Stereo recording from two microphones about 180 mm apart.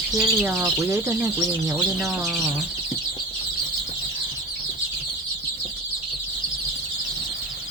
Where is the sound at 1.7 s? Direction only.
Centre (ahead or behind).